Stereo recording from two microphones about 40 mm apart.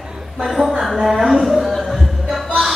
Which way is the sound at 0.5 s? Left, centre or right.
Centre.